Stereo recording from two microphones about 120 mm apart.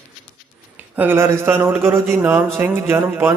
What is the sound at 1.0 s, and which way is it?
A man's voice, 20° right (ahead or behind).